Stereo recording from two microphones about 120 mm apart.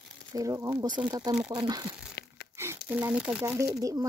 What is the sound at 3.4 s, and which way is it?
Speech, 30° right (ahead or behind).